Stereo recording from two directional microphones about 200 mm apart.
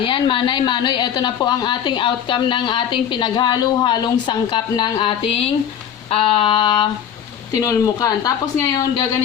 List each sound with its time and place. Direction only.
0.0 s a woman's voice: 25° left (ahead or behind)